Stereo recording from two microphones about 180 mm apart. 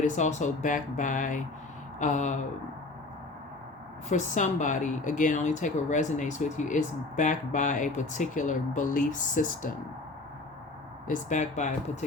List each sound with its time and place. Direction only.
0.0 s a woman's voice: 40° left (ahead or behind)
4.1 s a woman's voice: 45° left (ahead or behind)
11.1 s speech: 40° left (ahead or behind)